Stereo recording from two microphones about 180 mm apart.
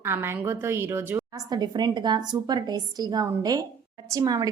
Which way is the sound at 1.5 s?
25° right (ahead or behind).